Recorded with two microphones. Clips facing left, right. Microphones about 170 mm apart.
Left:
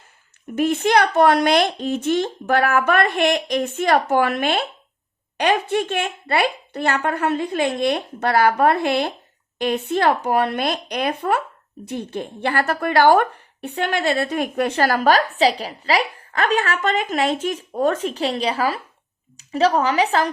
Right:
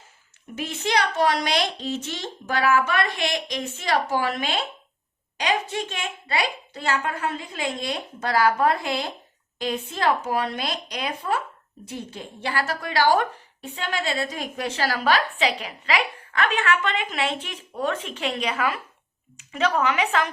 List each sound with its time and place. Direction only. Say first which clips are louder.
0.5 s a woman's voice: left 8 dB; 55° left (ahead or behind); by 20.3 s 35° left (ahead or behind)